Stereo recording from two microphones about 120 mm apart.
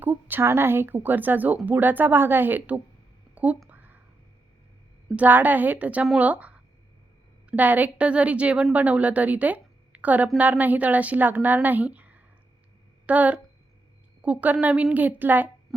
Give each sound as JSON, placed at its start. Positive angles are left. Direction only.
{"t": 0.0, "sound": "a woman's voice", "side_deg": -15}
{"t": 3.7, "sound": "a sound", "side_deg": -15}
{"t": 5.1, "sound": "a woman's voice", "side_deg": -15}